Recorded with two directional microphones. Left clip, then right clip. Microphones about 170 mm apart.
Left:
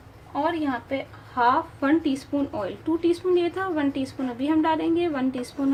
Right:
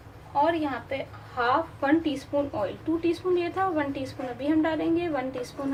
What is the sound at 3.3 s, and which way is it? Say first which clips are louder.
A woman's voice: left 2 dB; 50° left (ahead or behind).